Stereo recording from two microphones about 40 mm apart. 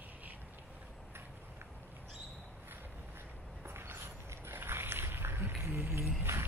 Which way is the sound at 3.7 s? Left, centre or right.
Right.